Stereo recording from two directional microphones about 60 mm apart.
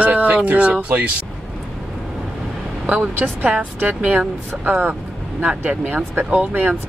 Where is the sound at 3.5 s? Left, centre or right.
Centre.